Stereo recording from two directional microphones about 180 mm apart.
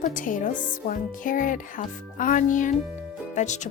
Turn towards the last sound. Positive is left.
turn(degrees=40)  # may be behind; listen again after turning